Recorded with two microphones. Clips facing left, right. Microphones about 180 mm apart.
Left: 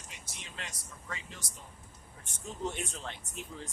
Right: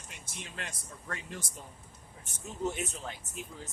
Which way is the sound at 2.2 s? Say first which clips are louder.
Right 3 dB; 5° right (ahead or behind).